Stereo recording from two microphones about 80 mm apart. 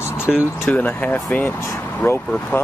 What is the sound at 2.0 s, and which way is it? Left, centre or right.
Speech, left.